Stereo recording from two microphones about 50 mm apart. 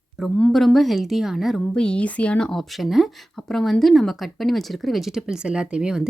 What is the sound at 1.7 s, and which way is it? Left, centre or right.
Speech, centre.